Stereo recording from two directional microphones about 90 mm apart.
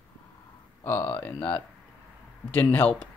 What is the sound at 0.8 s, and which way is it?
Speech, 20° left (ahead or behind).